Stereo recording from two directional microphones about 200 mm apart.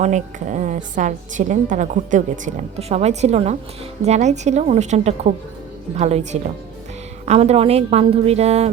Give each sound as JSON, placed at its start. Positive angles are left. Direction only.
{"t": 0.0, "sound": "a woman's voice", "side_deg": -40}